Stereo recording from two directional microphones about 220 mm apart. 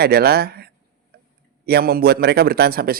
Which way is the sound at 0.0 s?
45° right (ahead or behind).